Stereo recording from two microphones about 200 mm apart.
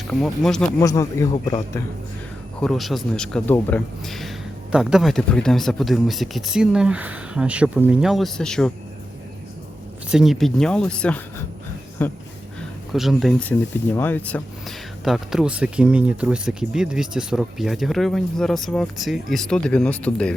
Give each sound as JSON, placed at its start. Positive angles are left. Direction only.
{"t": 0.1, "sound": "speech", "side_deg": 0}
{"t": 0.8, "sound": "speech", "side_deg": 15}
{"t": 2.6, "sound": "speech", "side_deg": 0}
{"t": 10.1, "sound": "speech", "side_deg": 0}